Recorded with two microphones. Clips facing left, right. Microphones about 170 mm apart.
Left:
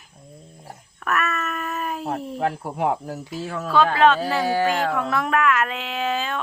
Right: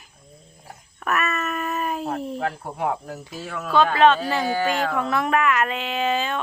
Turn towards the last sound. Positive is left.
turn(degrees=0)  # may be behind; listen again after turning